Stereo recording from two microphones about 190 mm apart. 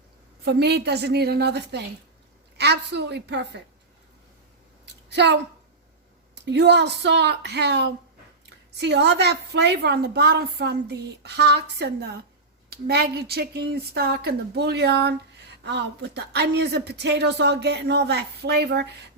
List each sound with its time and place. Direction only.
0.4 s a woman's voice: 60° right (ahead or behind)
5.0 s a woman's voice: 65° right (ahead or behind)